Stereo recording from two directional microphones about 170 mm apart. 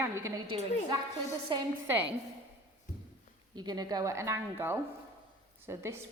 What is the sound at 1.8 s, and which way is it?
Speech, 10° right (ahead or behind).